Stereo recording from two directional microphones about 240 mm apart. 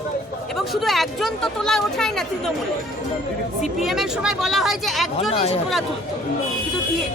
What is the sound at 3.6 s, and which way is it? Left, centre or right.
Speech, centre.